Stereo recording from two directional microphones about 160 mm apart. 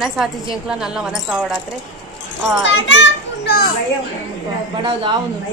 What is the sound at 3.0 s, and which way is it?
Children playing, 85° left.